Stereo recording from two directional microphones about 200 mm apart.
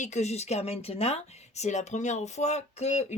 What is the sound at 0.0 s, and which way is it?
Speech, 35° left (ahead or behind).